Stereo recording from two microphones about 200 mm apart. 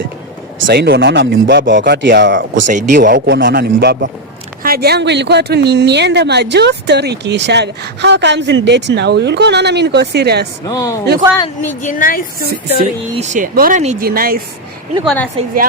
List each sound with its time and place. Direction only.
0.7 s speech: 55° right (ahead or behind)
2.6 s a man's voice: 40° right (ahead or behind)
10.7 s speech: 15° left (ahead or behind)
11.8 s a woman's voice: 40° left (ahead or behind)
13.1 s a man's voice: 40° right (ahead or behind)
15.0 s speech: 5° left (ahead or behind)